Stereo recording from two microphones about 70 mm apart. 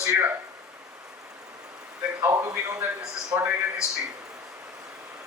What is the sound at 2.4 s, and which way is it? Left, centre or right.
Speech, right.